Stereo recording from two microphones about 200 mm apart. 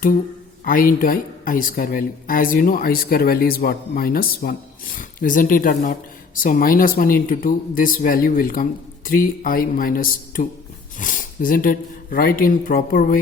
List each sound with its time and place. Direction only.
0.6 s speech: 45° left (ahead or behind)